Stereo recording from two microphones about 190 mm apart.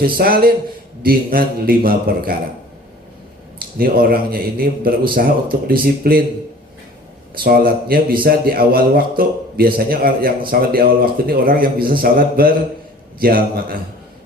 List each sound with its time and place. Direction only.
0.0 s a man's voice: 50° right (ahead or behind)
3.8 s a man's voice: 50° right (ahead or behind)
7.3 s a man's voice: 50° right (ahead or behind)